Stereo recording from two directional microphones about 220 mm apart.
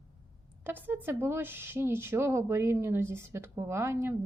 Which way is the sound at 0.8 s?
10° right (ahead or behind).